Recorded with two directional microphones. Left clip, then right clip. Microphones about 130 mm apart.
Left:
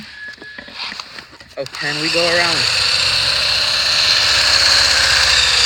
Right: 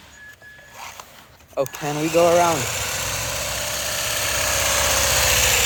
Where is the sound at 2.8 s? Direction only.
5° right (ahead or behind).